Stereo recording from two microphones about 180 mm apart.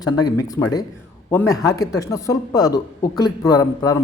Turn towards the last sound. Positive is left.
turn(degrees=20)  # may be behind; listen again after turning